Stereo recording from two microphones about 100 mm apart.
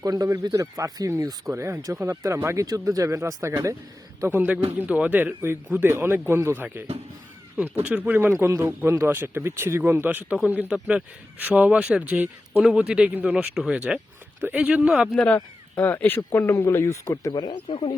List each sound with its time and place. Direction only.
0.0 s speech: 40° right (ahead or behind); by 8.3 s 15° right (ahead or behind)
8.4 s a man's voice: 30° right (ahead or behind); by 15.1 s 5° right (ahead or behind)
15.1 s speech: 10° left (ahead or behind); by 17.3 s 30° left (ahead or behind)
17.3 s speech: 45° left (ahead or behind)